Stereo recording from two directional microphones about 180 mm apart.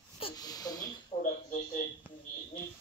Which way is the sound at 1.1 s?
35° left (ahead or behind).